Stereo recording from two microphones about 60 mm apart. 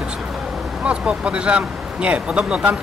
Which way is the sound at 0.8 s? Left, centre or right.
Centre.